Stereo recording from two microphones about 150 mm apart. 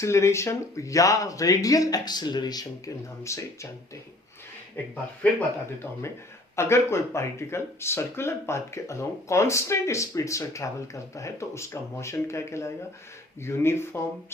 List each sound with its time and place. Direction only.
0.0 s speech: 20° left (ahead or behind)
5.2 s speech: 10° left (ahead or behind)
6.6 s speech: 20° left (ahead or behind)